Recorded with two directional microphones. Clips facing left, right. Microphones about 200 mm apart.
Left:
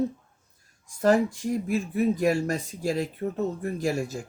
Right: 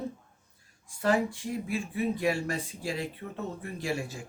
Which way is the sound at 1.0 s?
45° left (ahead or behind).